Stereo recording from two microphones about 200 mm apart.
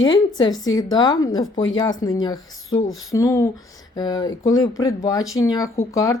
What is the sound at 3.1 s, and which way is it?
Speech, 15° left (ahead or behind).